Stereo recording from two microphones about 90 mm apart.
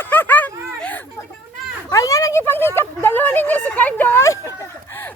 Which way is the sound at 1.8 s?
35° left (ahead or behind).